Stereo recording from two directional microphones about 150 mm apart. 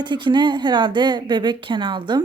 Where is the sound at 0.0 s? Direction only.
30° right (ahead or behind).